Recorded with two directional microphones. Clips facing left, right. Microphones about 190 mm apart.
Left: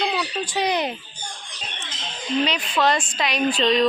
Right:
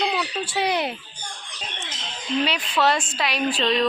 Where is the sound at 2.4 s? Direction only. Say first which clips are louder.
Even; 5° right (ahead or behind).